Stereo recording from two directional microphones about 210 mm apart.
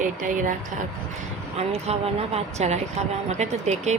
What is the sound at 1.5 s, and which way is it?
Speech, 30° right (ahead or behind).